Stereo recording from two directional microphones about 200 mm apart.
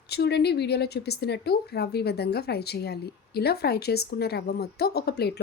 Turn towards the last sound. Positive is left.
turn(degrees=55)  # may be behind; listen again after turning